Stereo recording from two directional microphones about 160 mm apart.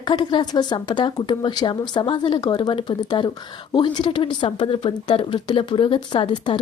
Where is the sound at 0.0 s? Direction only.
30° left (ahead or behind).